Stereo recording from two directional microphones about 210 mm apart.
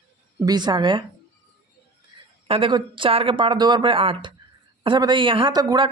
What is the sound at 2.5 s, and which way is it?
Speech, 25° right (ahead or behind).